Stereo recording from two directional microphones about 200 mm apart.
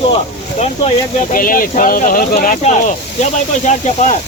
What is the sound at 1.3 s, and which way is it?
Speech, 45° left (ahead or behind).